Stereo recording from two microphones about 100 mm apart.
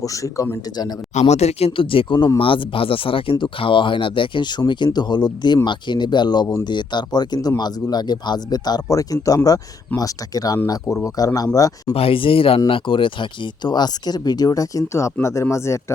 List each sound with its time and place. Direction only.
0.0 s speech: 35° left (ahead or behind)
1.2 s speech: 90° left; by 11.9 s 35° left (ahead or behind)
11.9 s speech: 65° left (ahead or behind); by 15.8 s 30° left (ahead or behind)